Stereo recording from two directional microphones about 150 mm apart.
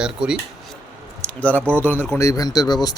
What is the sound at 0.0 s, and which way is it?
Speech, 5° right (ahead or behind).